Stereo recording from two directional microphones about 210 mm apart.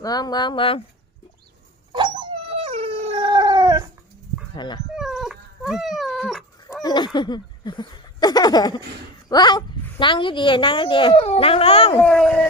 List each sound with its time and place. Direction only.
0.0 s a woman's voice: 20° left (ahead or behind)
1.9 s dog: 20° right (ahead or behind)
4.5 s a woman's voice: 20° left (ahead or behind)
4.9 s dog: centre (ahead or behind)
6.8 s a woman's voice: 20° left (ahead or behind)
12.0 s speech: 5° left (ahead or behind)